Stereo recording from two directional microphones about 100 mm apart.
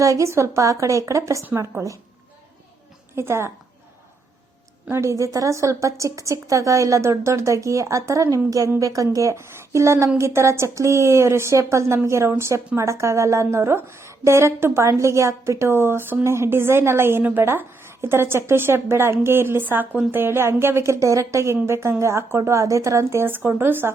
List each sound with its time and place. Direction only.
0.0 s a woman's voice: 30° right (ahead or behind)
3.2 s a woman's voice: 25° right (ahead or behind)
4.9 s a woman's voice: 30° right (ahead or behind)